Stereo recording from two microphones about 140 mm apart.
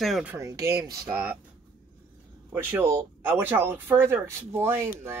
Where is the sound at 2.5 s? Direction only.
15° right (ahead or behind).